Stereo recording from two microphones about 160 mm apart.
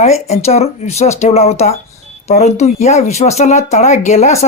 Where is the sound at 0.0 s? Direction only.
40° left (ahead or behind).